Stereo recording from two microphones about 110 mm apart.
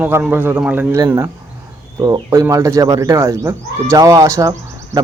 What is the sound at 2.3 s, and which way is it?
Speech, 25° right (ahead or behind).